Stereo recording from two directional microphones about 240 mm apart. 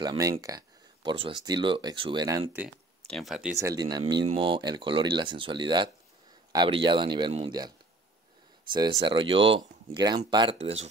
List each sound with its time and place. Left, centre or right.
0.0 s speech: centre
3.1 s speech: centre
8.7 s speech: centre